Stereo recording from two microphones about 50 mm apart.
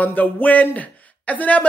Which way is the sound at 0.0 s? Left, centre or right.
Left.